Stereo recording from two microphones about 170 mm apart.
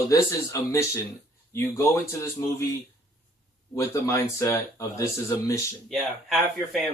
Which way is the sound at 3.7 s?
20° left (ahead or behind).